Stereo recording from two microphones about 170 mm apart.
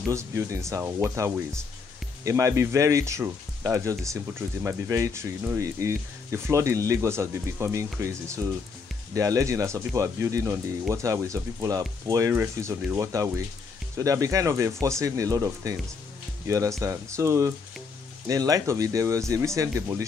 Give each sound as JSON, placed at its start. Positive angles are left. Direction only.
{"t": 0.1, "sound": "speech", "side_deg": -15}